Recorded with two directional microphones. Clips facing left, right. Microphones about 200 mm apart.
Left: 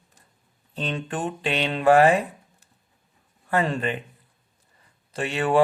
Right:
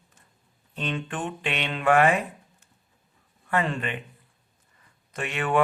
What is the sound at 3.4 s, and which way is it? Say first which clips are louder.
Mantra: left 3 dB; 35° left (ahead or behind).